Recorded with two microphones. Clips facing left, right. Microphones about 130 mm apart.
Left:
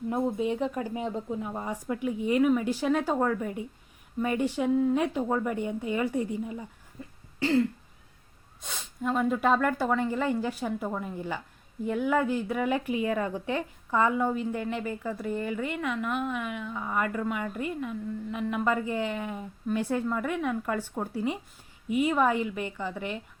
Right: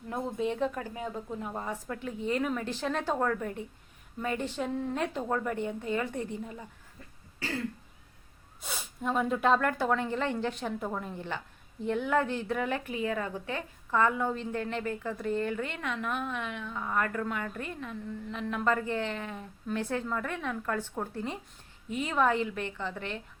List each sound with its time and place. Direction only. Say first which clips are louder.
0.1 s speech: left 3 dB; 15° left (ahead or behind)
1.4 s speech: left 2 dB; 5° left (ahead or behind)
7.0 s cough: left 9 dB; 15° left (ahead or behind)
7.3 s throat clearing: left 11 dB; 20° left (ahead or behind)
8.6 s speech: left 2 dB; 5° right (ahead or behind); by 23.2 s 10° left (ahead or behind)